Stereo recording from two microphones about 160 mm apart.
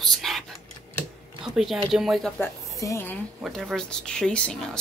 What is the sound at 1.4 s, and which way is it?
Speech, centre (ahead or behind).